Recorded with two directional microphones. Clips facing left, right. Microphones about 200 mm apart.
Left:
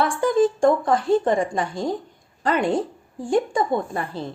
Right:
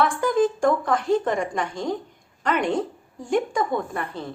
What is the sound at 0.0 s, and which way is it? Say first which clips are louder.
A woman's voice: left 2 dB; 30° left (ahead or behind).